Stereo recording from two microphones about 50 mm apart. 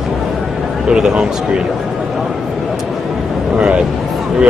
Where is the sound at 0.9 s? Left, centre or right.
Centre.